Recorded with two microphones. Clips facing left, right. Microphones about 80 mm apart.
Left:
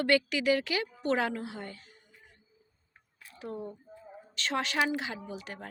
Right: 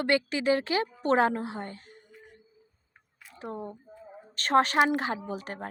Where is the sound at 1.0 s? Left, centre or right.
Right.